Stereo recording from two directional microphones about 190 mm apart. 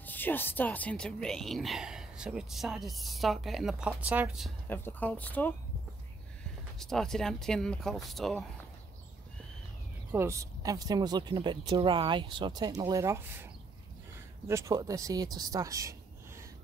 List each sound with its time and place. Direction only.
0.0 s speech: 10° left (ahead or behind); by 4.5 s 5° right (ahead or behind)
4.6 s speech: 10° left (ahead or behind)
10.1 s speech: 15° right (ahead or behind)
14.5 s speech: 15° right (ahead or behind)